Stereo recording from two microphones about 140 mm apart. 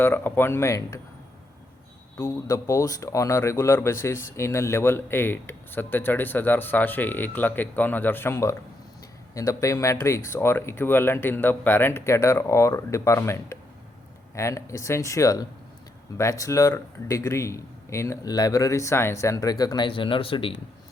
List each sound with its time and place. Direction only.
0.0 s speech: 15° left (ahead or behind)
2.1 s a man's voice: 25° left (ahead or behind)